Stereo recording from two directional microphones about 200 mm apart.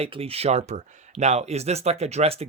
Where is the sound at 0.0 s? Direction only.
30° right (ahead or behind).